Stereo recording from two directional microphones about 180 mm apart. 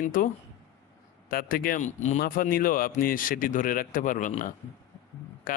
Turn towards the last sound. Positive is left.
turn(degrees=50)  # may be behind; listen again after turning